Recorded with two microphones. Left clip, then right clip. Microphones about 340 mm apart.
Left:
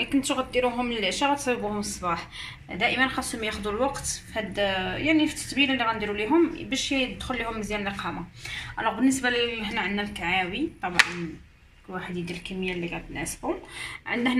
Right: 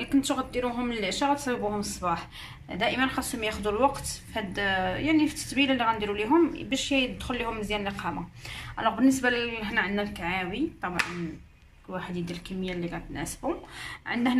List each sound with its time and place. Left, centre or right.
0.0 s a woman's voice: centre
11.9 s a woman's voice: centre